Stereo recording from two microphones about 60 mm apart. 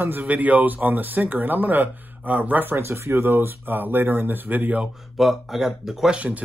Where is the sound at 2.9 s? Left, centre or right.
Right.